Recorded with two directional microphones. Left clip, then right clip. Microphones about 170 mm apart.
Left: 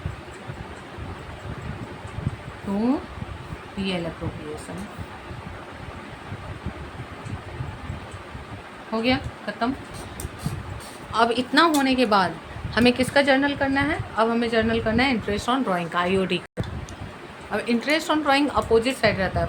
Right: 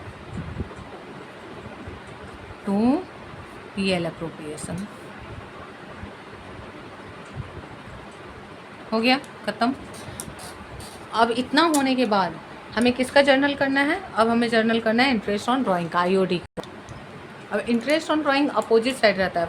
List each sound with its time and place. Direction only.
8.9 s speech: 40° right (ahead or behind)
11.1 s a woman's voice: 5° right (ahead or behind); by 13.1 s 15° left (ahead or behind)
13.1 s a woman's voice: 5° right (ahead or behind); by 16.4 s 20° right (ahead or behind)
17.5 s a woman's voice: 5° right (ahead or behind)